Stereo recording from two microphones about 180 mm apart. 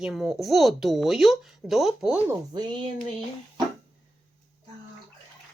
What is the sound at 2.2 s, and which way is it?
Speech, 25° right (ahead or behind).